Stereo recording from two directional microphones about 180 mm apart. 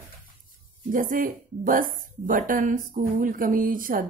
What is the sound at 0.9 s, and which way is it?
A woman's voice, 50° right (ahead or behind).